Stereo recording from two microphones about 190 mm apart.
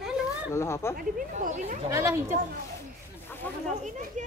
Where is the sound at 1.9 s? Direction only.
15° right (ahead or behind).